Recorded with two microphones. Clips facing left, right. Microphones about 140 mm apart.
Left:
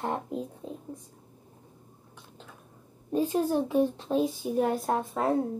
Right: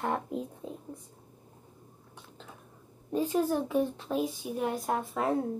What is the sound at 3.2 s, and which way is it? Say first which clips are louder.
Speech: left 1 dB; 15° left (ahead or behind).